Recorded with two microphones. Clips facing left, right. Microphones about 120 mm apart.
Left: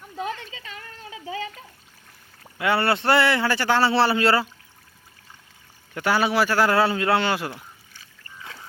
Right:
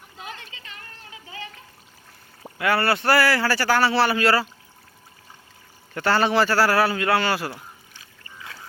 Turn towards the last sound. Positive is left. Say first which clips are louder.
# even
turn(degrees=20)  # may be behind; listen again after turning